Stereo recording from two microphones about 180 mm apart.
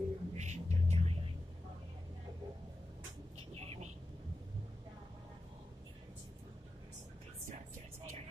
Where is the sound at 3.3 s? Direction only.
35° right (ahead or behind).